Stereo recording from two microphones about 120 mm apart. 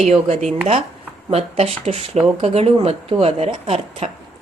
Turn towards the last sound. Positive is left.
turn(degrees=-60)  # may be behind; listen again after turning